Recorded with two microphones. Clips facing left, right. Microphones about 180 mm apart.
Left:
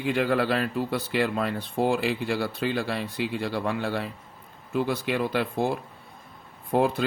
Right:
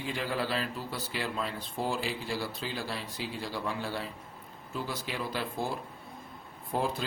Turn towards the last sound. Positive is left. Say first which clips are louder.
# left 8 dB
turn(degrees=65)  # may be behind; listen again after turning